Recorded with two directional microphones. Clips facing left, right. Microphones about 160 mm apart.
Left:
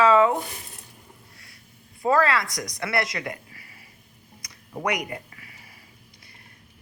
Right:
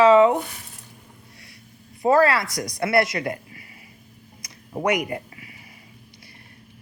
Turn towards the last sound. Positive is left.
turn(degrees=-20)  # may be behind; listen again after turning